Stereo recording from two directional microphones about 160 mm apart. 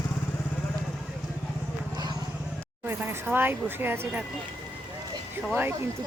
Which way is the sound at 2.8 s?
15° right (ahead or behind).